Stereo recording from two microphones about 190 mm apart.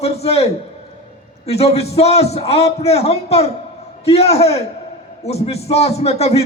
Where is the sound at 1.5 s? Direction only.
35° left (ahead or behind).